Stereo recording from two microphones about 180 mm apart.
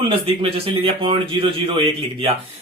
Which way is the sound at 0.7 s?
30° right (ahead or behind).